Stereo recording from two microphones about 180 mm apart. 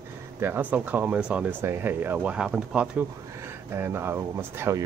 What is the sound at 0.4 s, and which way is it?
Speech, 10° right (ahead or behind).